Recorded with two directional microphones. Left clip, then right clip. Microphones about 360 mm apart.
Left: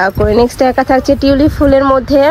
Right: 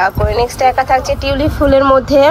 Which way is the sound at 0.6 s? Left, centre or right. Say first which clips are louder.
Left 1 dB; left.